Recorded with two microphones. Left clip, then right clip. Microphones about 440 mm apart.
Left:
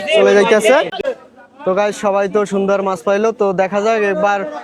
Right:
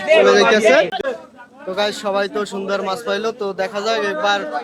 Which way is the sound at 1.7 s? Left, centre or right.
Left.